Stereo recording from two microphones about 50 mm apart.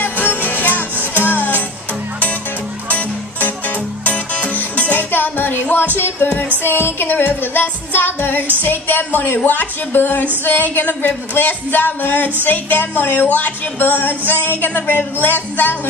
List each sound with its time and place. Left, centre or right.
0.0 s music: left
2.9 s music: left
8.6 s a woman's voice: left